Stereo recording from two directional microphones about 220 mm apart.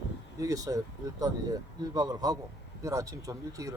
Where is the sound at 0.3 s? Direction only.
15° right (ahead or behind).